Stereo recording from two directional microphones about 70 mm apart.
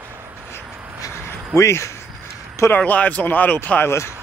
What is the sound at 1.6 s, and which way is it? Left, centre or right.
Speech, left.